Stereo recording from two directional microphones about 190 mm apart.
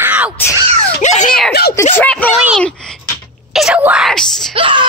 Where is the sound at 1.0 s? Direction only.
40° left (ahead or behind).